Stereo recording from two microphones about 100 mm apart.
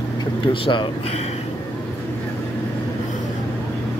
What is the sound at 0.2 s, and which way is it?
Speech, 55° left (ahead or behind).